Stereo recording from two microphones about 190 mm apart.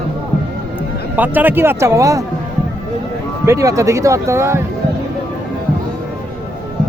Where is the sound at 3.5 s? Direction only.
15° right (ahead or behind).